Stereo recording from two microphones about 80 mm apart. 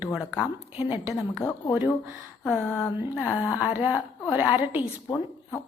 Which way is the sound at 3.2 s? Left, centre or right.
Centre.